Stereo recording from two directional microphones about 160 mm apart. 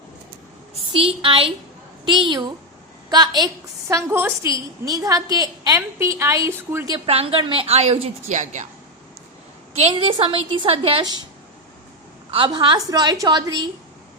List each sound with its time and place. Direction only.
0.7 s a woman's voice: 35° right (ahead or behind); by 6.9 s 15° right (ahead or behind)
6.9 s a woman's voice: 35° right (ahead or behind); by 8.6 s 50° right (ahead or behind)
9.7 s a woman's voice: 40° right (ahead or behind)
12.3 s a woman's voice: 30° right (ahead or behind)